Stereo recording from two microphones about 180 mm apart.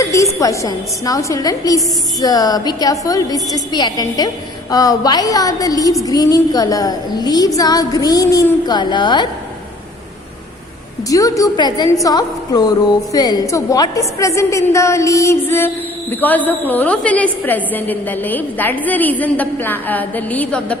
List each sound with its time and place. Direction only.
0.0 s a sound: 15° left (ahead or behind)
0.3 s speech: 15° left (ahead or behind)
11.1 s a woman's voice: 20° left (ahead or behind)